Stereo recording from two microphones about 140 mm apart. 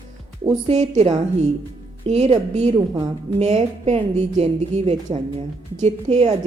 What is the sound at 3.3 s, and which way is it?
A woman's voice, 50° right (ahead or behind).